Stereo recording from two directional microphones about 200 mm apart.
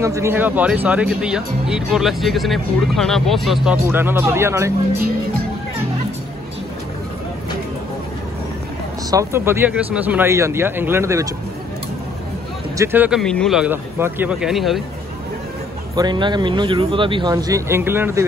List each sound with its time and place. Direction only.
0.0 s speech: 15° right (ahead or behind)
9.1 s speech: 15° right (ahead or behind)
12.7 s speech: 10° right (ahead or behind)
13.2 s speech: 5° left (ahead or behind)
16.0 s speech: 20° right (ahead or behind)